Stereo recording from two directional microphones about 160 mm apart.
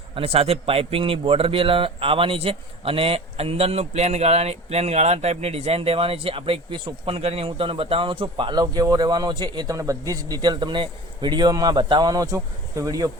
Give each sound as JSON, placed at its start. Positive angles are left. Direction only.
{"t": 0.1, "sound": "speech", "side_deg": -35}